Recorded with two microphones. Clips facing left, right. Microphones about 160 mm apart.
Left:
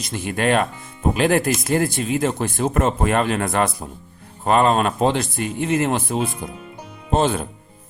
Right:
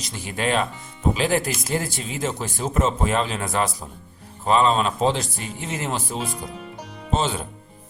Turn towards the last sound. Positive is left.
turn(degrees=55)  # may be behind; listen again after turning